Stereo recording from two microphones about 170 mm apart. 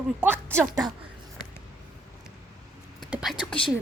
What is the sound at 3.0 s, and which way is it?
Whispering, 5° right (ahead or behind).